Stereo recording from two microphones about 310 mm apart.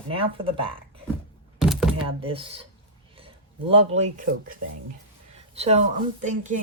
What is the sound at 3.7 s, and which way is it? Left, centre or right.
Speech, centre.